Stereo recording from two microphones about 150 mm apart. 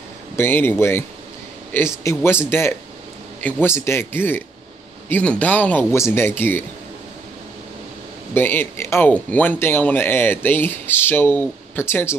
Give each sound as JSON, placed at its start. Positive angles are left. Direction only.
{"t": 0.4, "sound": "speech", "side_deg": 15}
{"t": 8.4, "sound": "speech", "side_deg": 15}